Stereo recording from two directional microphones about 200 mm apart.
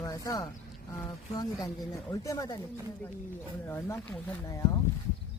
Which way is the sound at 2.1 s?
15° left (ahead or behind).